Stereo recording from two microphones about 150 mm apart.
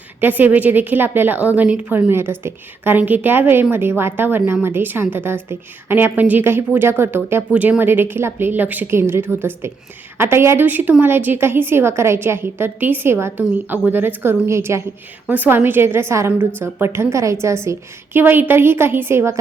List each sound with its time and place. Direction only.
0.2 s a woman's voice: 10° right (ahead or behind)